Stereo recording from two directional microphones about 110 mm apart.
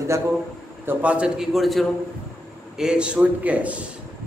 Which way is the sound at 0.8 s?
10° right (ahead or behind).